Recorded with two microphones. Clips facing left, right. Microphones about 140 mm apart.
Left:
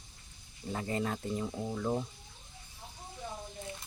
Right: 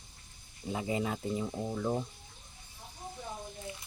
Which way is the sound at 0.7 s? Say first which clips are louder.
Right 1 dB; 10° right (ahead or behind).